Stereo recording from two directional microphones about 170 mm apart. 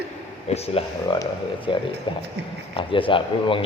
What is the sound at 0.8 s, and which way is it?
Speech, 35° left (ahead or behind).